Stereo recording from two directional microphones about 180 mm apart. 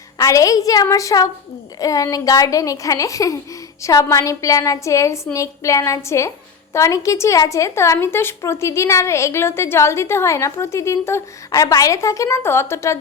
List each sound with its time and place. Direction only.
0.2 s speech: 20° left (ahead or behind)